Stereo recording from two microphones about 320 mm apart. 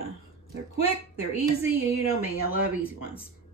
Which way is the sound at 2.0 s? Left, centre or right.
Left.